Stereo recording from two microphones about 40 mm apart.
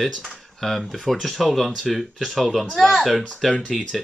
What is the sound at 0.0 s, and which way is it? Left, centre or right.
Speech, centre.